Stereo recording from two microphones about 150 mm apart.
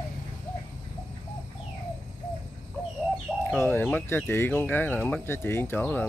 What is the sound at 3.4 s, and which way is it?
Chicken, 15° left (ahead or behind).